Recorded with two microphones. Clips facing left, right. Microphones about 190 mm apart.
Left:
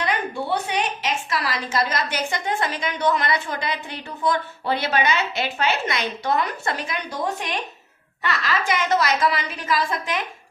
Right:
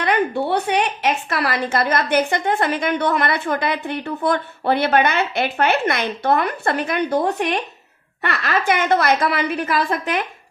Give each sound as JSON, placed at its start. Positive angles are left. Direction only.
{"t": 0.0, "sound": "a woman's voice", "side_deg": -60}